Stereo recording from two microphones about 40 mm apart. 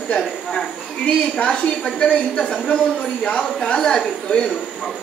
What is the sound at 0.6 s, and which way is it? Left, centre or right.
A woman's voice, centre.